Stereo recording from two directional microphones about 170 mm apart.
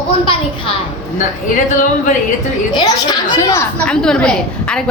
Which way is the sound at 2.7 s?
25° left (ahead or behind).